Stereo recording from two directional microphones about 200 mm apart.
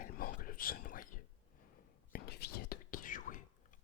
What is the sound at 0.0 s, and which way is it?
Whispering, 45° left (ahead or behind).